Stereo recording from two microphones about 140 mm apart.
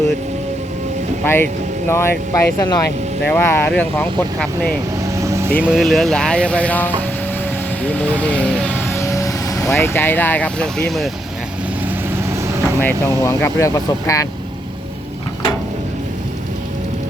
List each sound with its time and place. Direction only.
1.2 s speech: 15° left (ahead or behind)
3.2 s speech: 15° left (ahead or behind)
5.0 s vehicle: 20° right (ahead or behind)
5.6 s speech: centre (ahead or behind)
11.9 s vehicle: 20° right (ahead or behind)
13.2 s speech: 20° left (ahead or behind)